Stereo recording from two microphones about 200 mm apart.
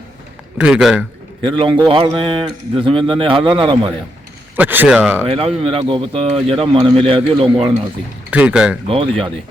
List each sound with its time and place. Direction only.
0.6 s speech: 5° right (ahead or behind)
1.4 s speech: 25° right (ahead or behind)
4.5 s speech: 10° right (ahead or behind)
5.3 s speech: 30° right (ahead or behind)
8.3 s speech: 5° right (ahead or behind)